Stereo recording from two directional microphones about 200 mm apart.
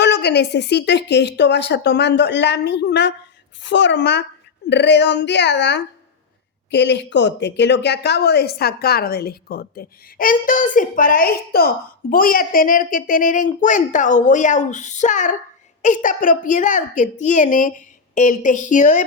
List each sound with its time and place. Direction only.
0.0 s a woman's voice: 60° left (ahead or behind); by 19.0 s 40° left (ahead or behind)